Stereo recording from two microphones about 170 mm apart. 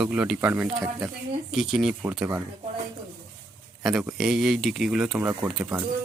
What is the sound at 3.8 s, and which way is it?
A man's voice, 5° right (ahead or behind).